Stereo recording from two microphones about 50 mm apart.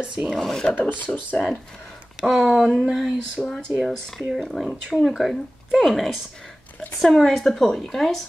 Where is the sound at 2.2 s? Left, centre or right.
Centre.